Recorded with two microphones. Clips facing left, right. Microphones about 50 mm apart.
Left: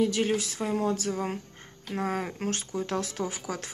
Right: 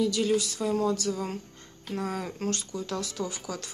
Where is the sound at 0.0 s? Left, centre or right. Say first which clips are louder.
Even; left.